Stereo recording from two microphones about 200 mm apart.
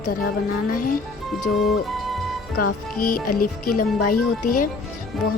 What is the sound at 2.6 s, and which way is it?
Speech, 45° left (ahead or behind).